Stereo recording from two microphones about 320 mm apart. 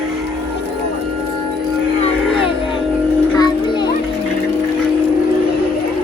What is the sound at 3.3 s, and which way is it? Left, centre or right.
Children playing, centre.